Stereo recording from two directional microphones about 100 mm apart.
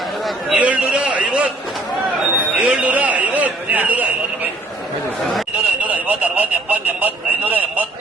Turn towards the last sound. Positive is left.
turn(degrees=-15)  # may be behind; listen again after turning